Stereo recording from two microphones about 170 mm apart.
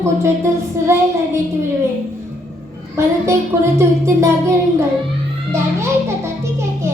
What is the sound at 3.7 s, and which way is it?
Speech, 15° right (ahead or behind).